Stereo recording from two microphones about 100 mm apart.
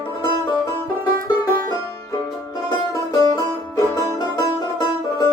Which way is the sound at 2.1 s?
35° left (ahead or behind).